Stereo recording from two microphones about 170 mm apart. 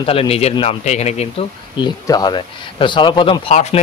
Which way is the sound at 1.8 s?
25° left (ahead or behind).